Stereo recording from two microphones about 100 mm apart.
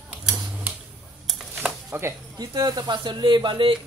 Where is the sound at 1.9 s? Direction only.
25° right (ahead or behind).